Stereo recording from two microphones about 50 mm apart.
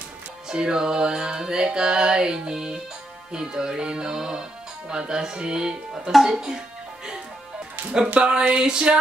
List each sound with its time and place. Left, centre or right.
0.5 s speech: centre
6.1 s speech: centre
8.1 s a sound: centre